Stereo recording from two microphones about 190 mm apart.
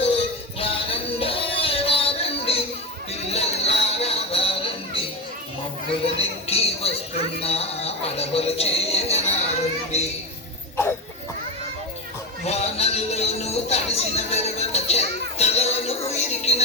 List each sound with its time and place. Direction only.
0.6 s music: 30° left (ahead or behind)
6.1 s a sound: 30° left (ahead or behind)
12.5 s music: 35° left (ahead or behind)